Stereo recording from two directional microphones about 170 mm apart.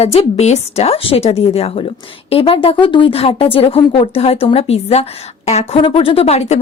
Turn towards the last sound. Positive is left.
turn(degrees=40)  # may be behind; listen again after turning